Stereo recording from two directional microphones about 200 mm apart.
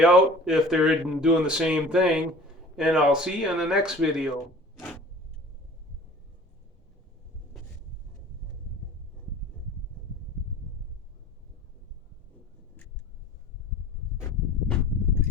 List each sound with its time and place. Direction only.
0.0 s speech: 5° right (ahead or behind)